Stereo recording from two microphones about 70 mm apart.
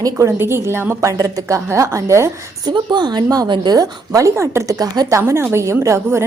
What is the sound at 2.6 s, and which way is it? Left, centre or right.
Speech, right.